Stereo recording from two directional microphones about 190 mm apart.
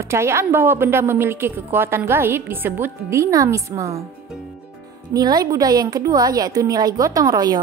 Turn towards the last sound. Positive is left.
turn(degrees=-20)  # may be behind; listen again after turning